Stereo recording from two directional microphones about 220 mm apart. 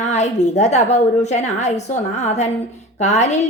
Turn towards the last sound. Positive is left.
turn(degrees=30)  # may be behind; listen again after turning